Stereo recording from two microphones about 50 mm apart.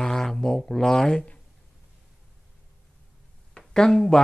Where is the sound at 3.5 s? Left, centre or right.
Centre.